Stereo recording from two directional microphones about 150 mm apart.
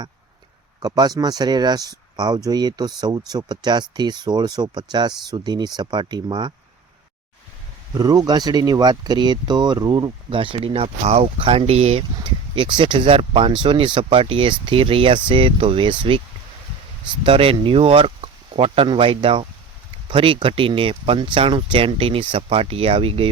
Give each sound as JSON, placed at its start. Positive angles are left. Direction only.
{"t": 0.8, "sound": "speech", "side_deg": -25}
{"t": 7.9, "sound": "speech", "side_deg": -25}
{"t": 17.2, "sound": "speech", "side_deg": -35}